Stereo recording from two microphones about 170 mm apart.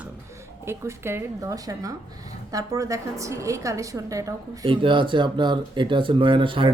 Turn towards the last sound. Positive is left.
turn(degrees=-30)  # may be behind; listen again after turning